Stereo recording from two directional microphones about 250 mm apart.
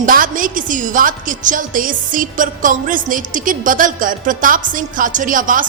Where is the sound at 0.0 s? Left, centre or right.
Right.